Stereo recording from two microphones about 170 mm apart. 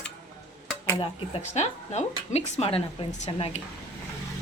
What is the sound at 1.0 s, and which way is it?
Speech, 35° left (ahead or behind).